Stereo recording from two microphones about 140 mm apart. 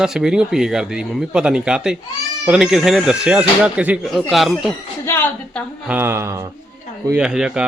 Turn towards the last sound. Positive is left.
turn(degrees=-5)  # may be behind; listen again after turning